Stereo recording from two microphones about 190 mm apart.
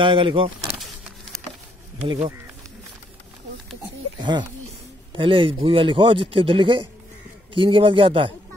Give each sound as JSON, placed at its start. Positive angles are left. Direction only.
{"t": 0.0, "sound": "speech", "side_deg": -25}
{"t": 0.7, "sound": "power windows", "side_deg": 0}
{"t": 2.0, "sound": "speech", "side_deg": -25}
{"t": 4.2, "sound": "speech", "side_deg": -25}